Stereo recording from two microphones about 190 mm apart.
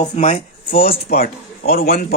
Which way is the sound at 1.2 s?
50° left (ahead or behind).